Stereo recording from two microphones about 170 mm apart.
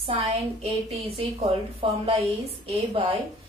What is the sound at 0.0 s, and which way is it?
A woman's voice, 35° right (ahead or behind).